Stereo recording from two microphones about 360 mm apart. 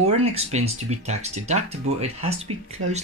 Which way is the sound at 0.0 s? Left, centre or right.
Centre.